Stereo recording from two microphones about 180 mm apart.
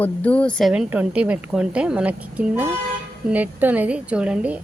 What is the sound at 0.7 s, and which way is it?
A woman's voice, 5° right (ahead or behind).